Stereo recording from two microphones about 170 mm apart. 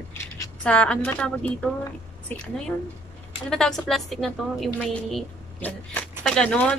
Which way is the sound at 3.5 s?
Centre (ahead or behind).